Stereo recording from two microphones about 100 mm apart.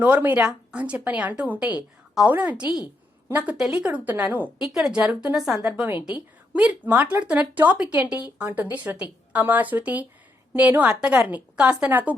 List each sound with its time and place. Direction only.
0.0 s speech: 15° right (ahead or behind)
4.6 s speech: 5° right (ahead or behind)